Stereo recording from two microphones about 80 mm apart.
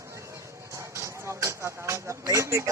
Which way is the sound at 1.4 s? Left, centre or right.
Right.